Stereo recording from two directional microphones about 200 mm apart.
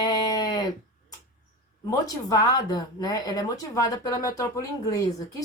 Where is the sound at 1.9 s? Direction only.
15° left (ahead or behind).